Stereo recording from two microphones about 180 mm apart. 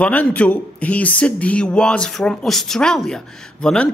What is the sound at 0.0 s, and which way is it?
Speech, 10° left (ahead or behind).